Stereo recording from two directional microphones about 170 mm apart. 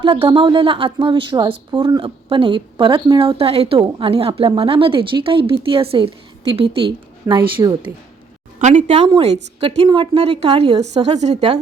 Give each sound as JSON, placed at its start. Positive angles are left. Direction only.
{"t": 0.0, "sound": "a woman's voice", "side_deg": -30}
{"t": 7.3, "sound": "a woman's voice", "side_deg": -25}
{"t": 8.5, "sound": "a woman's voice", "side_deg": -45}